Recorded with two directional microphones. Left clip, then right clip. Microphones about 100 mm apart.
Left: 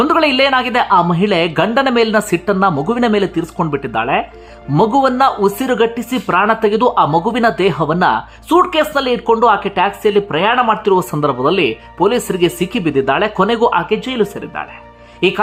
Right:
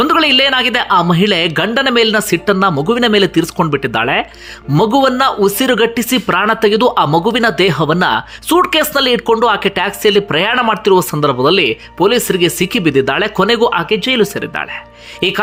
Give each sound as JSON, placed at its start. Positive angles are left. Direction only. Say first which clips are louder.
{"t": 0.1, "sound": "speech", "louder": "right 1 dB", "side_deg": -10}
{"t": 3.1, "sound": "speech", "louder": "right 4 dB", "side_deg": -10}
{"t": 7.1, "sound": "speech", "louder": "right 1 dB", "side_deg": -10}
{"t": 8.4, "sound": "speech", "louder": "even", "side_deg": -30}
{"t": 10.9, "sound": "speech", "louder": "right 3 dB", "side_deg": -5}
{"t": 12.5, "sound": "speech", "louder": "right 3 dB", "side_deg": -15}